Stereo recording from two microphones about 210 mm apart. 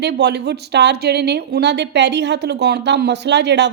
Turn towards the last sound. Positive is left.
turn(degrees=-55)  # may be behind; listen again after turning